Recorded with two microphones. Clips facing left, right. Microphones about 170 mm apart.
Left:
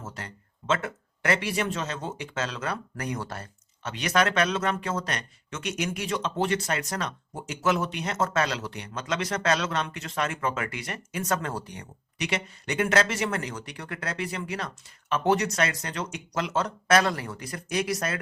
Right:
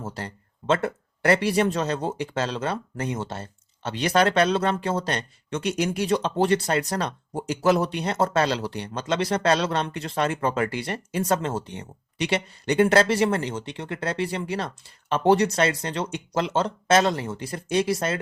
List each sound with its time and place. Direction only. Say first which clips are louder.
0.0 s speech: right 6 dB; 35° right (ahead or behind)